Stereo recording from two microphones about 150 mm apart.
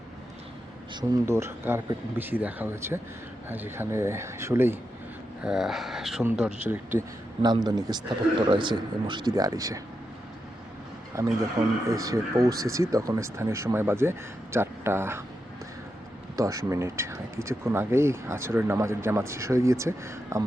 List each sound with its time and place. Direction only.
1.1 s speech: 15° right (ahead or behind)
5.4 s speech: 5° right (ahead or behind)
7.4 s speech: 25° right (ahead or behind)
11.1 s speech: 20° right (ahead or behind)
16.3 s speech: 20° right (ahead or behind)